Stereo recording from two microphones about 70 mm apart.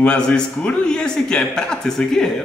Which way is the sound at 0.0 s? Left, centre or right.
Centre.